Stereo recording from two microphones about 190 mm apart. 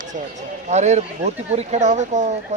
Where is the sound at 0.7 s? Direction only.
35° right (ahead or behind).